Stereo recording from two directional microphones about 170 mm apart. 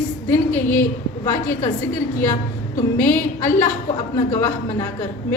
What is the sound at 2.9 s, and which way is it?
A woman's voice, 15° left (ahead or behind).